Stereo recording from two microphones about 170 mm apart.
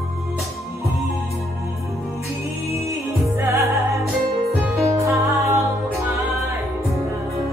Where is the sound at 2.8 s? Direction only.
15° right (ahead or behind).